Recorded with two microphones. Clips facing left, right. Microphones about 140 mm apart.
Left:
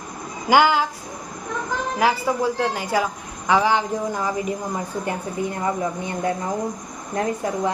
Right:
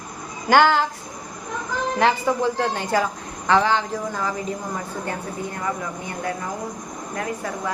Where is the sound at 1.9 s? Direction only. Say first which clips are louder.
Right 1 dB; 10° left (ahead or behind).